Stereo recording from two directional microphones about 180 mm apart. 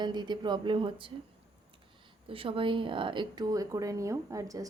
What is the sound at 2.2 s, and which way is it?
Speech, 30° right (ahead or behind).